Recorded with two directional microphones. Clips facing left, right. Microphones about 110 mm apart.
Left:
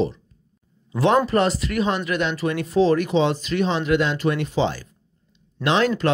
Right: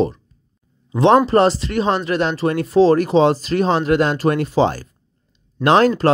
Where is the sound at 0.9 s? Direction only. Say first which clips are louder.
Right 5 dB; 30° right (ahead or behind).